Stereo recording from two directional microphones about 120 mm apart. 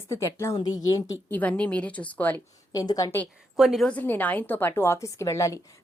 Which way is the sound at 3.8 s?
15° left (ahead or behind).